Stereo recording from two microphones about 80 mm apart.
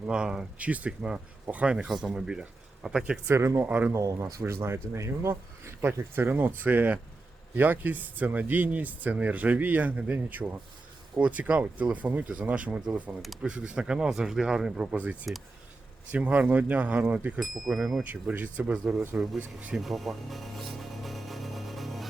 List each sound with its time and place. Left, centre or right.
0.1 s speech: centre
3.2 s speech: right
3.7 s speech: centre
3.9 s speech: right; by 14.8 s centre
14.9 s speech: centre
17.4 s speech: centre
18.1 s speech: centre
19.1 s speech: centre
19.7 s music: centre